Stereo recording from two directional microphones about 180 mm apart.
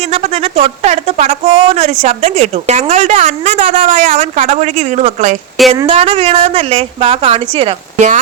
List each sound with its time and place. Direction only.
0.1 s a woman's voice: 35° right (ahead or behind)
5.7 s a woman's voice: 30° right (ahead or behind)